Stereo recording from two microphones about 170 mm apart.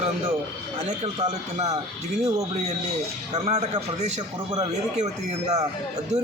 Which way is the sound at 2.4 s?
40° right (ahead or behind).